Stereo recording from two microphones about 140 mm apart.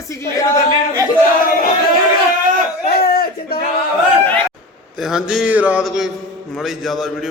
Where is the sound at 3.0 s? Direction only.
90° left.